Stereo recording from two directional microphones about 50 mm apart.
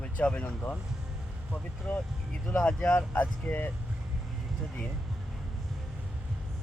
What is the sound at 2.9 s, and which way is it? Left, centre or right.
Speech, left.